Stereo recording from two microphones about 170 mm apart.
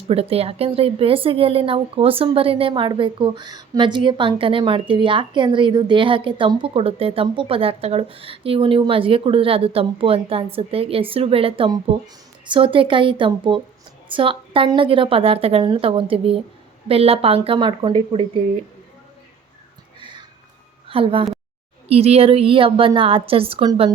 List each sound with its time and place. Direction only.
0.1 s speech: 35° right (ahead or behind)
20.0 s a sound: 30° right (ahead or behind)
20.8 s speech: 30° right (ahead or behind)